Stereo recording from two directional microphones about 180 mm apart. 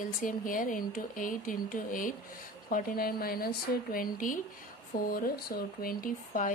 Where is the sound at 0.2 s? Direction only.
45° left (ahead or behind).